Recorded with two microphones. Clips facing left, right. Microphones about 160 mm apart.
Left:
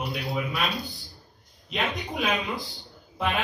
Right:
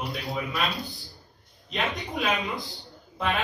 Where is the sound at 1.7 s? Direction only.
Centre (ahead or behind).